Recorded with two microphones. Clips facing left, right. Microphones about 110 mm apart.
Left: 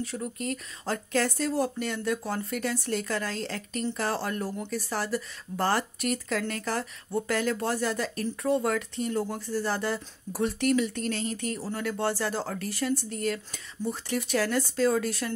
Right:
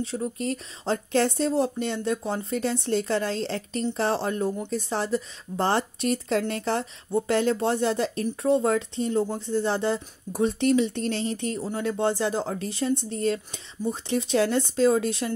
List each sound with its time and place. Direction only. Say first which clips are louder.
0.0 s speech: right 4 dB; 30° right (ahead or behind)